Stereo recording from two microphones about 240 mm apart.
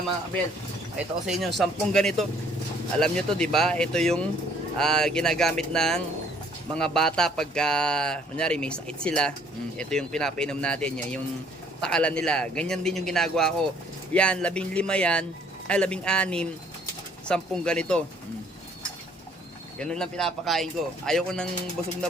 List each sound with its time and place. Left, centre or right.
0.9 s a man's voice: centre
19.8 s a man's voice: centre